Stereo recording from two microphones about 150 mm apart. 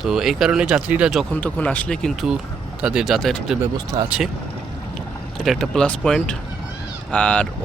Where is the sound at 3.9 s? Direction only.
25° right (ahead or behind).